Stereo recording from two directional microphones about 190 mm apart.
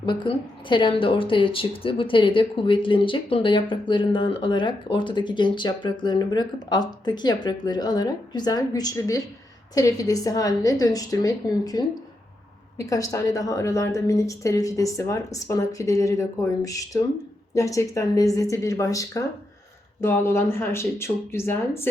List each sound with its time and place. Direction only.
0.0 s a woman's voice: 25° left (ahead or behind)